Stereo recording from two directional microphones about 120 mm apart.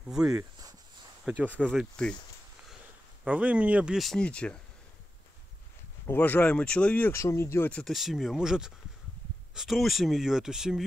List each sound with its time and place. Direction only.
0.1 s speech: 5° right (ahead or behind)
0.4 s a sound: 30° right (ahead or behind)
1.2 s speech: 10° right (ahead or behind)
1.5 s speech: 5° left (ahead or behind)
3.3 s speech: 10° right (ahead or behind); by 4.6 s 10° left (ahead or behind)
6.0 s speech: 15° left (ahead or behind)
7.7 s speech: centre (ahead or behind)